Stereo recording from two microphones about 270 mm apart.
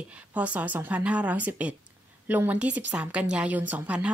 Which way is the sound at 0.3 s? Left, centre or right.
Centre.